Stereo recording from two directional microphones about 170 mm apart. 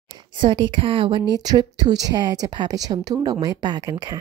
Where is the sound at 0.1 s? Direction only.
30° right (ahead or behind).